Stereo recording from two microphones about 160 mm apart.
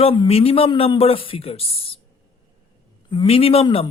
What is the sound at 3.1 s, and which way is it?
Speech, 35° left (ahead or behind).